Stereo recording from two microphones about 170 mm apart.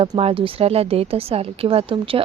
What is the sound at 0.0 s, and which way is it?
A woman's voice, 35° right (ahead or behind).